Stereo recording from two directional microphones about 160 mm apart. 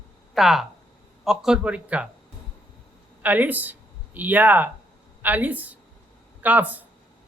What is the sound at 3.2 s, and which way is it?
A woman's voice, 10° right (ahead or behind).